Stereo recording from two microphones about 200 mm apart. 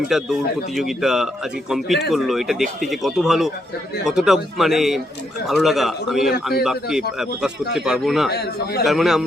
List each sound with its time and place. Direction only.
0.1 s speech: centre (ahead or behind)
8.3 s a man's voice: 55° left (ahead or behind)
8.8 s speech: centre (ahead or behind)